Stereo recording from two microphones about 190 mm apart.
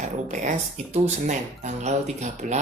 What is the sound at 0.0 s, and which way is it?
Speech, 40° right (ahead or behind).